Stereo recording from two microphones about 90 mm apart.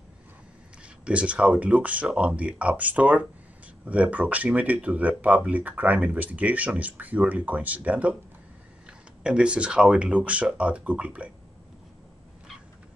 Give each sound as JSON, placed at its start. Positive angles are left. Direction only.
{"t": 0.8, "sound": "speech", "side_deg": -15}
{"t": 9.2, "sound": "speech", "side_deg": -10}